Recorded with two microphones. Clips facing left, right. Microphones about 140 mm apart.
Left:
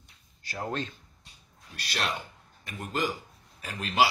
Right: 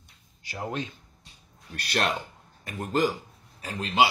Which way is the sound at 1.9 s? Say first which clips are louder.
Right 5 dB; 50° right (ahead or behind).